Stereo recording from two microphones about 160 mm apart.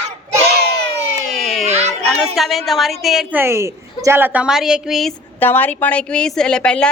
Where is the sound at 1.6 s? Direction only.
45° right (ahead or behind).